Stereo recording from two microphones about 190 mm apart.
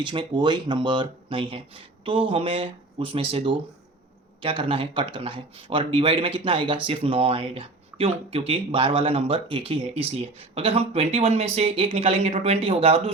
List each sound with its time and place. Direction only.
0.0 s speech: 25° right (ahead or behind)